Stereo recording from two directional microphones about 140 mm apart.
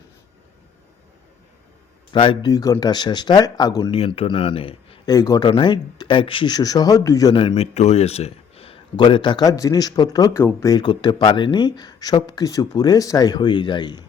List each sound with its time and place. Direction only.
2.1 s speech: 35° left (ahead or behind)
2.5 s speech: 25° left (ahead or behind)
3.9 s speech: 45° left (ahead or behind)
5.0 s speech: 25° left (ahead or behind)